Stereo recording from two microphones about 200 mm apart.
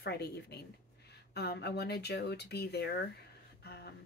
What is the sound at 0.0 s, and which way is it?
Speech, 55° left (ahead or behind).